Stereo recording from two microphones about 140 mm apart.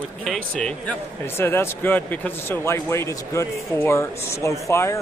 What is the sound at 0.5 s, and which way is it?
Speech, 5° left (ahead or behind).